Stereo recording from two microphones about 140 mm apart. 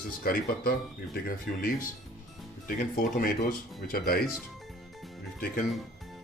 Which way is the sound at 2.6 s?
90° left.